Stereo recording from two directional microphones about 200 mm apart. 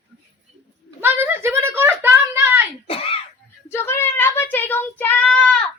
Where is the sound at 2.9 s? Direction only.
30° left (ahead or behind).